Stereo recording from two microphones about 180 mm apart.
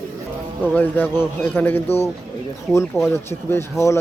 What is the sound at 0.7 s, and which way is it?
A man's voice, 10° left (ahead or behind).